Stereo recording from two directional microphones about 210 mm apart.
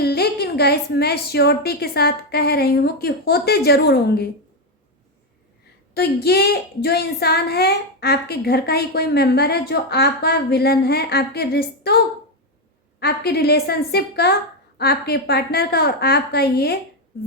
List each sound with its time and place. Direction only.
0.0 s speech: 50° left (ahead or behind)
5.9 s speech: 50° left (ahead or behind)
13.0 s speech: 50° left (ahead or behind)